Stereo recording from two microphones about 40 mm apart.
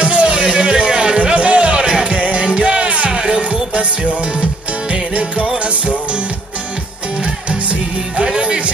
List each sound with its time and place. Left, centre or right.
0.0 s music: right
3.1 s music: centre
8.2 s music: right